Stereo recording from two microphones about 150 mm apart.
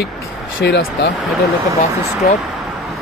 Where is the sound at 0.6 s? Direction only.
90° left.